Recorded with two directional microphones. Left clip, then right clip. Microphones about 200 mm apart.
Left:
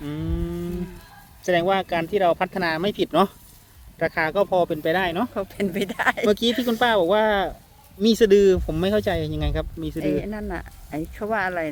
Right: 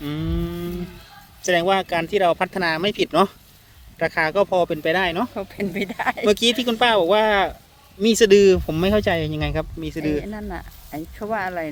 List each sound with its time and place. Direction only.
0.0 s a sound: 30° right (ahead or behind)
1.4 s speech: 35° right (ahead or behind)
5.3 s speech: 30° left (ahead or behind)
6.2 s speech: 35° right (ahead or behind)
10.2 s speech: 30° left (ahead or behind)